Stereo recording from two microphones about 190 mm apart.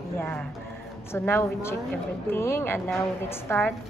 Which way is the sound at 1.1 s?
10° left (ahead or behind).